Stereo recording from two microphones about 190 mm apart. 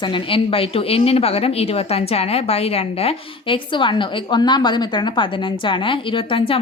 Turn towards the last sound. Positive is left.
turn(degrees=25)  # may be behind; listen again after turning